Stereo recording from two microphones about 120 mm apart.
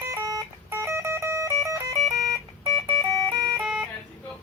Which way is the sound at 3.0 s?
30° right (ahead or behind).